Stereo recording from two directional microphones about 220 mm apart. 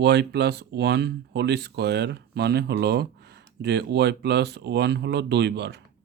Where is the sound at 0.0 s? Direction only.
50° right (ahead or behind).